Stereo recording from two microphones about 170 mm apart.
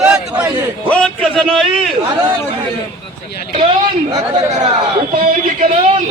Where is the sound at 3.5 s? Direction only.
30° right (ahead or behind).